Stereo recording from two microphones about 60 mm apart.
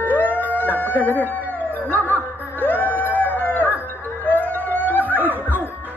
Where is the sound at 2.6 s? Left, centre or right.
Left.